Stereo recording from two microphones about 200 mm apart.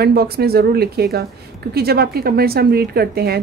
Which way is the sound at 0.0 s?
50° right (ahead or behind).